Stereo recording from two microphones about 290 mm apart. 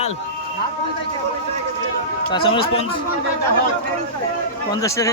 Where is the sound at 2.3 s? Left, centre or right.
Centre.